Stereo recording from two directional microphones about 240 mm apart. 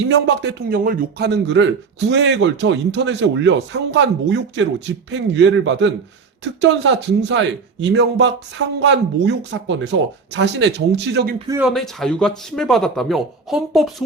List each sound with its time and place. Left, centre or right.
0.1 s a man's voice: right
11.3 s speech: centre
11.6 s speech: centre